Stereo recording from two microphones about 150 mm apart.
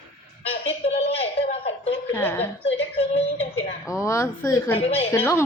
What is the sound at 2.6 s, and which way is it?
A woman's voice, 40° left (ahead or behind).